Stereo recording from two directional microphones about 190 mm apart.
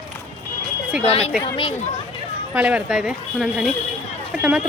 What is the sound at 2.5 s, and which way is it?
Speech, 5° right (ahead or behind).